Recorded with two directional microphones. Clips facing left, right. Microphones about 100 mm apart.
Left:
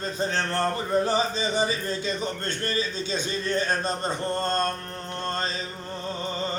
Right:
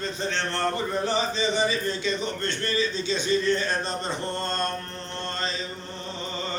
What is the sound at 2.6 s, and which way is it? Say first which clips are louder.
A man's voice: right 2 dB; 45° left (ahead or behind).